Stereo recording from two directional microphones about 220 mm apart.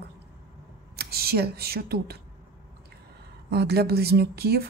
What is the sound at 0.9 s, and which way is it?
Speech, 45° right (ahead or behind).